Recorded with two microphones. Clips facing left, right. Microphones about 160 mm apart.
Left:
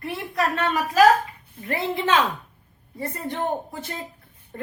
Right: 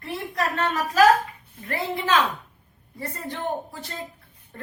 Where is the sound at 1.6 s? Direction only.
25° left (ahead or behind).